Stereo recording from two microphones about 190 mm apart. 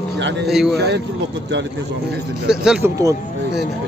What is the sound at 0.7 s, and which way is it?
Speech, 65° right (ahead or behind).